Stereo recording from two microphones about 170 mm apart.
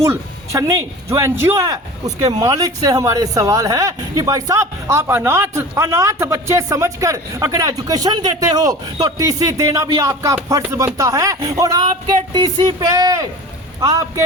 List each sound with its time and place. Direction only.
0.5 s speech: 15° right (ahead or behind)